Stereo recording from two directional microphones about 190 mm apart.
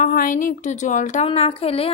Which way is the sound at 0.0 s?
45° left (ahead or behind).